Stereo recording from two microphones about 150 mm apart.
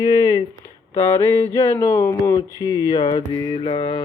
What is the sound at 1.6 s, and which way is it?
Speech, 20° left (ahead or behind).